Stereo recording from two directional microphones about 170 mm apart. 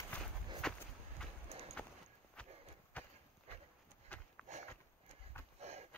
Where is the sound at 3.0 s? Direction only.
10° left (ahead or behind).